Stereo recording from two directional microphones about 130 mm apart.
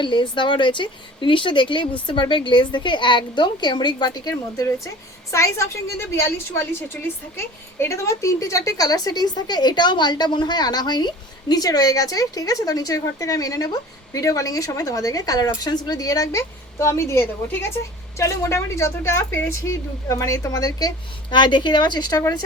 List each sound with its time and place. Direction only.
0.0 s a woman's voice: 35° left (ahead or behind)